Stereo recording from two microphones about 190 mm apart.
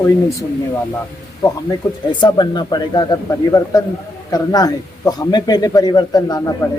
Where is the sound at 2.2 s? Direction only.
20° left (ahead or behind).